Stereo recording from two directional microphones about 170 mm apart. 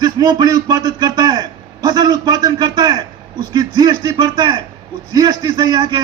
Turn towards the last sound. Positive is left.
turn(degrees=-25)  # may be behind; listen again after turning